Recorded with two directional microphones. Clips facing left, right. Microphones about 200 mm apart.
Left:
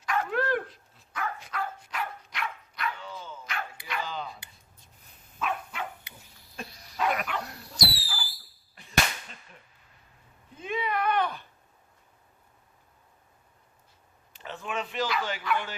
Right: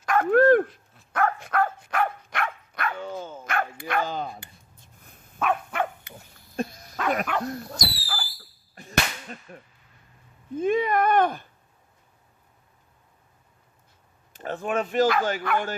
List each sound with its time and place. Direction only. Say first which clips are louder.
0.0 s dog: right 11 dB; 50° right (ahead or behind)
8.7 s whip: right 2 dB; 45° right (ahead or behind)
10.6 s a sound: right 8 dB; 45° right (ahead or behind)
14.3 s speech: right 8 dB; 50° right (ahead or behind)